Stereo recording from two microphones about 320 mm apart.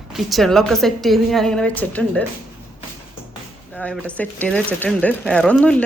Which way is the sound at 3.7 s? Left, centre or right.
Centre.